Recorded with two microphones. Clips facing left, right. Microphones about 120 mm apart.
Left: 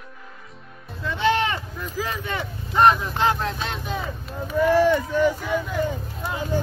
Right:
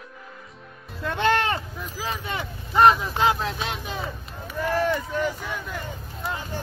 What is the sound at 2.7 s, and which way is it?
Vehicle, centre (ahead or behind).